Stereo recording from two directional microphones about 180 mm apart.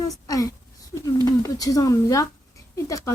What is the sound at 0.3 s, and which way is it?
Wail, 20° left (ahead or behind).